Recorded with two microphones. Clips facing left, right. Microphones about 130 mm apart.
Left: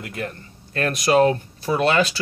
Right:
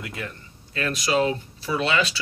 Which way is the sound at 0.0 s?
50° left (ahead or behind).